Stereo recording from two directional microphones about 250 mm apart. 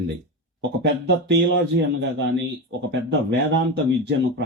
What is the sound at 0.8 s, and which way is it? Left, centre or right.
Speech, right.